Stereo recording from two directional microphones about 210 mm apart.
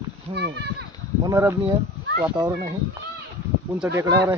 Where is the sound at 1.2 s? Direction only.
15° right (ahead or behind).